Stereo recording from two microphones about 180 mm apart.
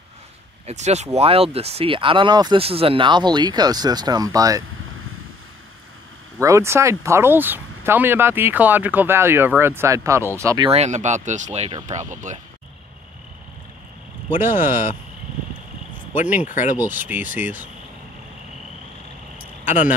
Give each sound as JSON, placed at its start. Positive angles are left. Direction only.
{"t": 0.7, "sound": "speech", "side_deg": -40}
{"t": 6.4, "sound": "speech", "side_deg": -15}
{"t": 10.7, "sound": "speech", "side_deg": -40}
{"t": 14.5, "sound": "speech", "side_deg": 45}
{"t": 16.4, "sound": "speech", "side_deg": 45}
{"t": 16.8, "sound": "speech", "side_deg": -10}
{"t": 19.6, "sound": "speech", "side_deg": 45}